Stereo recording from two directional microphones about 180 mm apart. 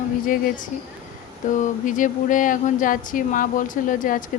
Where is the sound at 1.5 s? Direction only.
45° left (ahead or behind).